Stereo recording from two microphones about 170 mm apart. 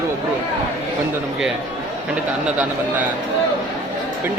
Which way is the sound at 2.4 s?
10° right (ahead or behind).